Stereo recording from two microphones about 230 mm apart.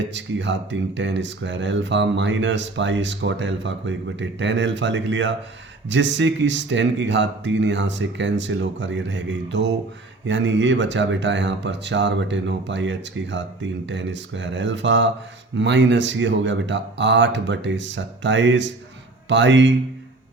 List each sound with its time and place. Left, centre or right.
0.0 s speech: right